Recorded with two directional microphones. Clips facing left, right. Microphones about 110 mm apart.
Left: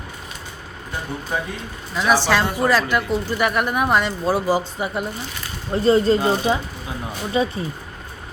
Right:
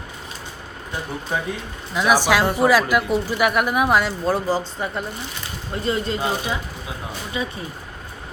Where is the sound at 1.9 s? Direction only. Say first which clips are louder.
Even; 10° right (ahead or behind); by 5.1 s 10° left (ahead or behind).